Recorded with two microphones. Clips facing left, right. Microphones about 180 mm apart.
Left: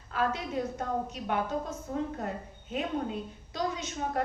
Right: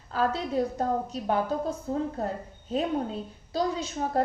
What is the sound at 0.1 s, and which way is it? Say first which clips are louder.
A woman's voice: right 4 dB; 35° right (ahead or behind).